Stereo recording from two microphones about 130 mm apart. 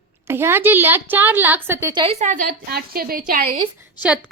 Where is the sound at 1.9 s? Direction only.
40° right (ahead or behind).